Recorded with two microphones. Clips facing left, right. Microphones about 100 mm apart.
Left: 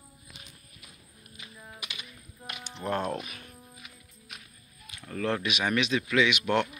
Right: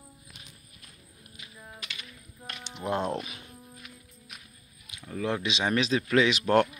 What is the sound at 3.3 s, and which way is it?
Music, 20° right (ahead or behind).